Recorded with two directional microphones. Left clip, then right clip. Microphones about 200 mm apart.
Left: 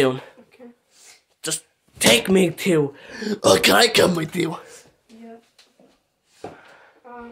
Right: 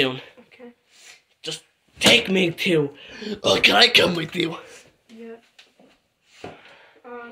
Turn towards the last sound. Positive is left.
turn(degrees=-40)  # may be behind; listen again after turning